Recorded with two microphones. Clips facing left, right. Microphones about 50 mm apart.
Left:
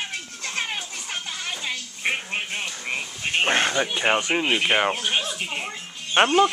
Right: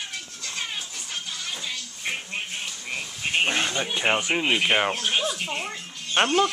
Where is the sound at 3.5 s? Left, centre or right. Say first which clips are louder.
Left 4 dB; left.